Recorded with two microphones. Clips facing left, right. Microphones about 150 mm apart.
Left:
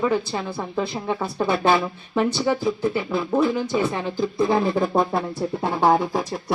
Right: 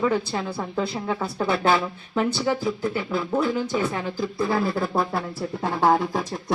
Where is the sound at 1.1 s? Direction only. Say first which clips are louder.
Left 3 dB; 15° left (ahead or behind).